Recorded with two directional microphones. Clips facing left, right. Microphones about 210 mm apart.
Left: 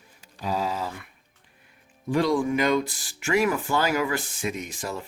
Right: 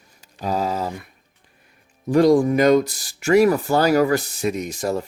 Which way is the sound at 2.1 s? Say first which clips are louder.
Right 8 dB; 40° right (ahead or behind).